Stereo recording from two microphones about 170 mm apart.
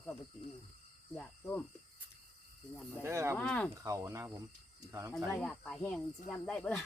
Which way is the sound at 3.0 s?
15° right (ahead or behind).